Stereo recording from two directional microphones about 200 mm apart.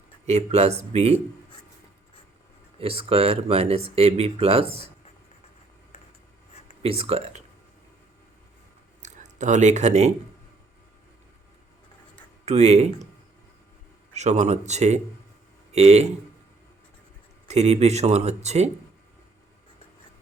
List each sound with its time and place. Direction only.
0.3 s speech: 35° right (ahead or behind)
2.7 s speech: 30° right (ahead or behind)
6.8 s speech: 30° right (ahead or behind)
9.0 s speech: 35° right (ahead or behind)
12.5 s speech: 35° right (ahead or behind)
14.1 s speech: 35° right (ahead or behind)
17.5 s speech: 35° right (ahead or behind)